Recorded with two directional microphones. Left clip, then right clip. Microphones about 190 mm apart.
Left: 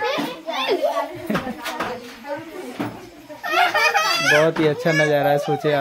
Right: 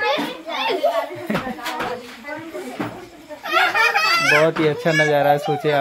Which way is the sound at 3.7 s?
10° left (ahead or behind).